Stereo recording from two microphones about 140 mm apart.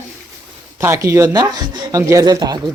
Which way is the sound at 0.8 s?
20° right (ahead or behind).